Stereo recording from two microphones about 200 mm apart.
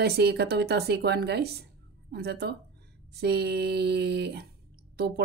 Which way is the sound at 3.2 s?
55° right (ahead or behind).